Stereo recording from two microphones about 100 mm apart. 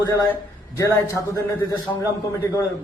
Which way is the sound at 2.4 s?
30° left (ahead or behind).